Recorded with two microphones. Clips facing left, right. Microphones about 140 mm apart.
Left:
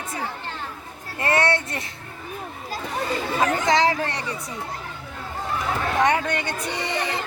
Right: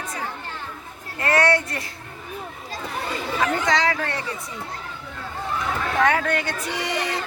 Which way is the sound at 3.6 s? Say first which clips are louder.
Left 2 dB; 25° left (ahead or behind).